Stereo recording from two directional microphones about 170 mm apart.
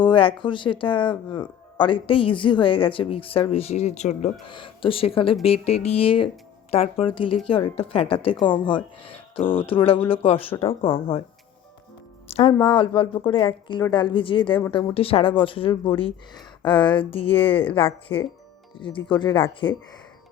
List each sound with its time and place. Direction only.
0.0 s speech: 30° left (ahead or behind)
4.4 s speech: 30° left (ahead or behind)
12.3 s a woman's voice: 35° left (ahead or behind)
19.6 s speech: 10° left (ahead or behind)